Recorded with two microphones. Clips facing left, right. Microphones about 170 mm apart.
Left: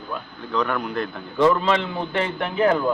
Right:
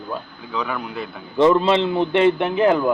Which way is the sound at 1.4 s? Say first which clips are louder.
Right 3 dB; 25° right (ahead or behind).